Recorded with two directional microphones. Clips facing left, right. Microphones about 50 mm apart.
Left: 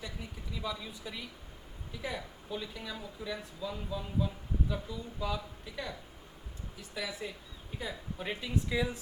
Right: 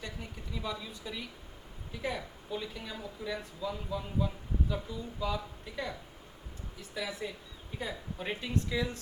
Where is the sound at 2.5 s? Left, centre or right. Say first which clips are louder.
Right 1 dB; centre.